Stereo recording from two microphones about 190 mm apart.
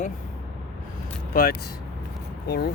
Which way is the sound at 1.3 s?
50° left (ahead or behind).